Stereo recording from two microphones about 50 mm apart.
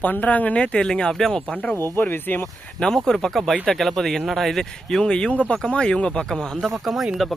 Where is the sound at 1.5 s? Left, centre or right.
Left.